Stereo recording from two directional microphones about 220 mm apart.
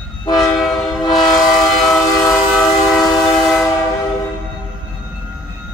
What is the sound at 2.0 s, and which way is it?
Train, 15° left (ahead or behind).